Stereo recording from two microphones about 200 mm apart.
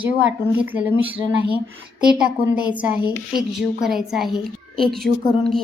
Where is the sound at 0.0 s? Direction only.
10° right (ahead or behind).